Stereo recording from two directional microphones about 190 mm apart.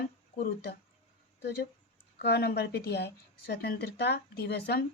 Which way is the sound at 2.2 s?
60° left (ahead or behind).